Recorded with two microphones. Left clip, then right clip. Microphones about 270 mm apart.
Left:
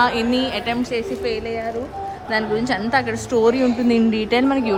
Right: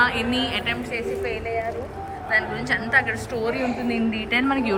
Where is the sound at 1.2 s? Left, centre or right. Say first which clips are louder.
Left 4 dB; left.